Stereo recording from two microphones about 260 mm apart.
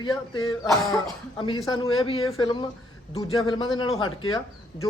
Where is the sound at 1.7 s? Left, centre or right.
Centre.